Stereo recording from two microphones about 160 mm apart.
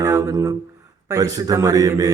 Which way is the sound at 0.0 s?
20° right (ahead or behind).